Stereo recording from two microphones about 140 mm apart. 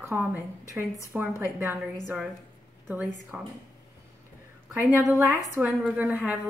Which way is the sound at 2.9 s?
10° right (ahead or behind).